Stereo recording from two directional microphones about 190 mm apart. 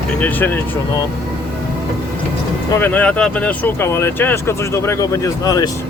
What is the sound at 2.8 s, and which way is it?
Speech, 10° left (ahead or behind).